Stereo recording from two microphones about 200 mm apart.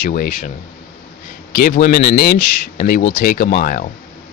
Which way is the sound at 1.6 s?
40° left (ahead or behind).